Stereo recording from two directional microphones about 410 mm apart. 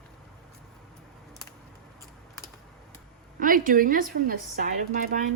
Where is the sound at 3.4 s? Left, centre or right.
Centre.